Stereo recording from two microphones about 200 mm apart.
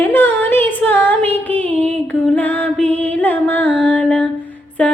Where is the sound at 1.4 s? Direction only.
5° left (ahead or behind).